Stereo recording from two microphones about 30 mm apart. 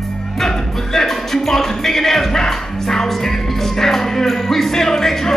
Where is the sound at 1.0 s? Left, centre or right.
Centre.